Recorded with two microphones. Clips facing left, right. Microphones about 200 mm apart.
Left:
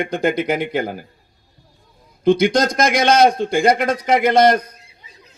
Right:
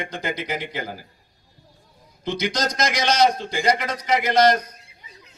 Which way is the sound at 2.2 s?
55° left (ahead or behind).